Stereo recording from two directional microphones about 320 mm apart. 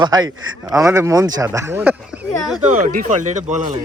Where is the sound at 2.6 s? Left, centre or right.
Right.